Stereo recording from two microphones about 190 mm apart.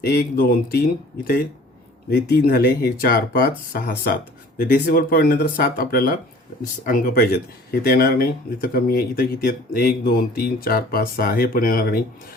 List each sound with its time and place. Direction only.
0.0 s speech: 60° left (ahead or behind)